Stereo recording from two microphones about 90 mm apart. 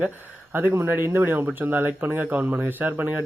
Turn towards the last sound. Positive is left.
turn(degrees=-20)  # may be behind; listen again after turning